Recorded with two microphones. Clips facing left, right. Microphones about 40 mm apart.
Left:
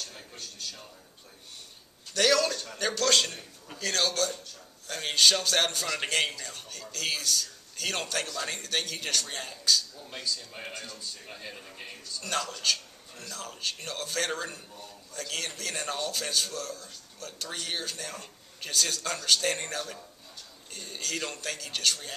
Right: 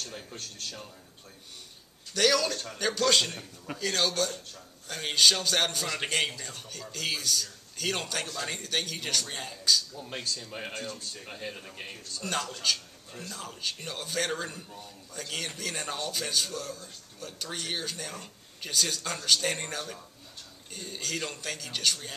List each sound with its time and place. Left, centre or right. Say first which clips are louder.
0.0 s a man's voice: right 3 dB; centre
2.1 s a man's voice: left 1 dB; centre
11.2 s a man's voice: right 3 dB; centre
12.2 s a man's voice: even; centre